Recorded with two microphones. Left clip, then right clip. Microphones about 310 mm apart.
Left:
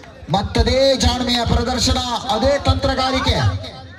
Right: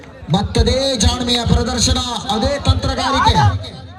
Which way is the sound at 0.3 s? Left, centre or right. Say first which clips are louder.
Right 1 dB; left.